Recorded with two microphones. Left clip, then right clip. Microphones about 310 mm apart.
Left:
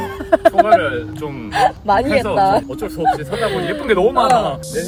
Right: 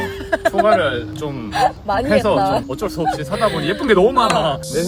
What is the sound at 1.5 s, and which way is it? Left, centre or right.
Speech, left.